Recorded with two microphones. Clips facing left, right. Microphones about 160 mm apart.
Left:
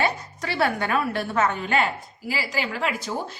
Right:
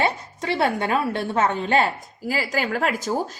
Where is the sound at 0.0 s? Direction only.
25° right (ahead or behind).